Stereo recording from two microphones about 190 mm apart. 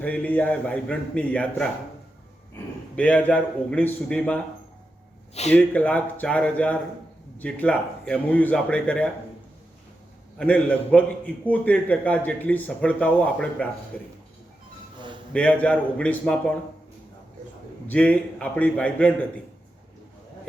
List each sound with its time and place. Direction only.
0.0 s speech: 5° left (ahead or behind)
2.9 s speech: 5° left (ahead or behind)
5.3 s a man's voice: 35° left (ahead or behind)
5.5 s speech: 10° left (ahead or behind)
10.3 s speech: 5° left (ahead or behind)
14.9 s a sound: 25° right (ahead or behind)
15.3 s speech: 5° left (ahead or behind)
17.8 s speech: 5° left (ahead or behind)